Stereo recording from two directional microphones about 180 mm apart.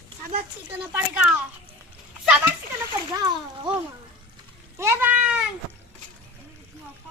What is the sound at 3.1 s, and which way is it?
Speech, 25° right (ahead or behind).